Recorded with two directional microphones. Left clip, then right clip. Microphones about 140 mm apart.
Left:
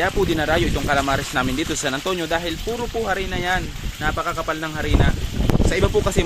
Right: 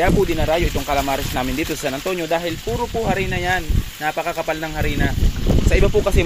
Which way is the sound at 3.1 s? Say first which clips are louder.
Right 1 dB; 20° right (ahead or behind).